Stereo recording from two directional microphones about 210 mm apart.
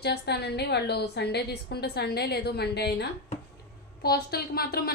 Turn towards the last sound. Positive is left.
turn(degrees=45)  # may be behind; listen again after turning